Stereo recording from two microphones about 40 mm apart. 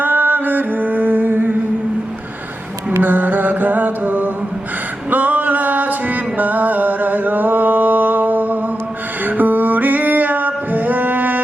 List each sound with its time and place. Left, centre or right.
0.0 s mantra: right
3.0 s music: right